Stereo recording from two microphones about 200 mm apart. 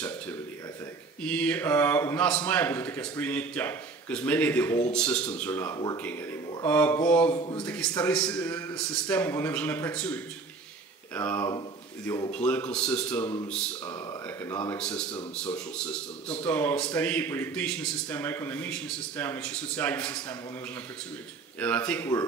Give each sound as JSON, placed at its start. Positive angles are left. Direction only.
{"t": 1.2, "sound": "speech", "side_deg": 5}
{"t": 7.3, "sound": "speech", "side_deg": 20}
{"t": 7.6, "sound": "speech", "side_deg": 10}
{"t": 21.5, "sound": "speech", "side_deg": 5}